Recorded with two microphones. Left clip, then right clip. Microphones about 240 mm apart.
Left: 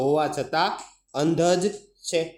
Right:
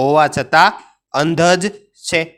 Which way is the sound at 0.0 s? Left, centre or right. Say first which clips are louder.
Right 10 dB; right.